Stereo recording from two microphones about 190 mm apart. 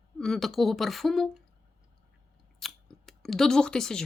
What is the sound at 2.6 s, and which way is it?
Scissors, centre (ahead or behind).